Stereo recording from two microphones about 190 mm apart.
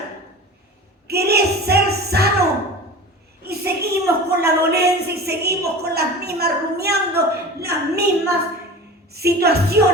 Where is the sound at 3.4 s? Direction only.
55° right (ahead or behind).